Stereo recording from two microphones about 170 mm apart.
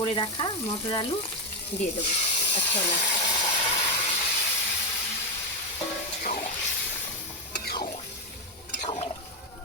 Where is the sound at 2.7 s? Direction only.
45° left (ahead or behind).